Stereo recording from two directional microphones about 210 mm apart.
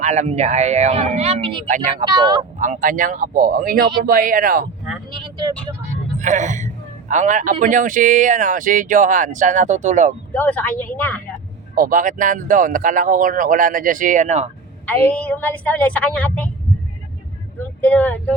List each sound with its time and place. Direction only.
0.0 s speech: 30° right (ahead or behind)
1.7 s speech: 35° right (ahead or behind)
2.0 s speech: 20° right (ahead or behind)
2.6 s speech: 35° right (ahead or behind)
5.1 s speech: 20° right (ahead or behind)
6.1 s speech: 35° right (ahead or behind)
10.3 s a woman's voice: 10° left (ahead or behind)
11.7 s speech: 40° right (ahead or behind)
14.8 s a woman's voice: 5° left (ahead or behind)
17.7 s speech: 5° left (ahead or behind)